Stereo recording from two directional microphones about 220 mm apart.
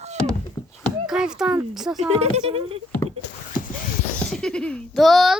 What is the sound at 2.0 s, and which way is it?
Speech, 30° right (ahead or behind).